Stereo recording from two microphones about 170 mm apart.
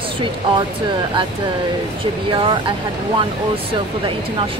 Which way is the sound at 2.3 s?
30° right (ahead or behind).